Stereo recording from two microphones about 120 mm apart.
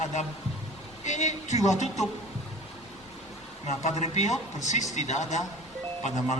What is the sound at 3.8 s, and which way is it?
A man's voice, 70° left (ahead or behind).